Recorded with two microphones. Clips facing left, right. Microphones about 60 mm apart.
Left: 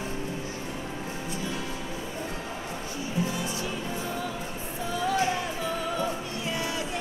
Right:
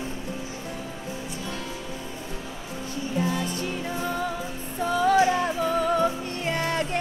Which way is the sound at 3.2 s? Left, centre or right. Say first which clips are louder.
Right 3 dB; right.